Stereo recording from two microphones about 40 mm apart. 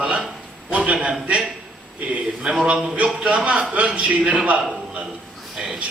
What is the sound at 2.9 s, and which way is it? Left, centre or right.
A man's voice, right.